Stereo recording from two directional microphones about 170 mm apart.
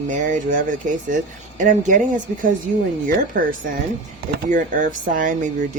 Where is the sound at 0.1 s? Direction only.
50° right (ahead or behind).